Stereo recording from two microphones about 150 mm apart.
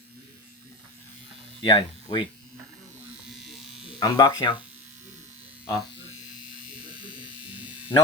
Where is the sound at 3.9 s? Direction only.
25° left (ahead or behind).